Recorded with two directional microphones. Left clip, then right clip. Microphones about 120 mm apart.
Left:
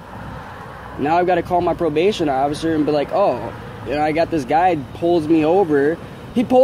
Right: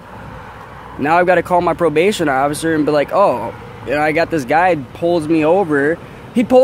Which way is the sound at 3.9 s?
90° right.